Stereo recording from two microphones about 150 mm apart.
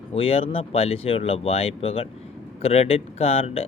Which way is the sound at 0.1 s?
40° left (ahead or behind).